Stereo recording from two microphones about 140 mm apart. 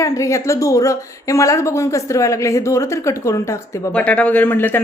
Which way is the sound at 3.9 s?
10° left (ahead or behind).